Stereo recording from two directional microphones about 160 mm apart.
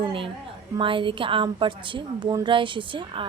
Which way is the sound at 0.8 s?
30° right (ahead or behind).